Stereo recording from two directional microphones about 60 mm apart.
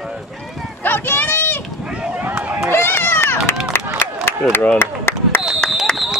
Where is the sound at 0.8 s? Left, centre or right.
Left.